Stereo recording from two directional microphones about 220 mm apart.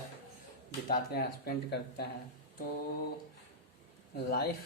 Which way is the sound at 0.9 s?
45° left (ahead or behind).